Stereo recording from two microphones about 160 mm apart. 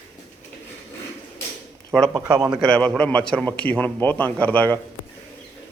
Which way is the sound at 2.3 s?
25° right (ahead or behind).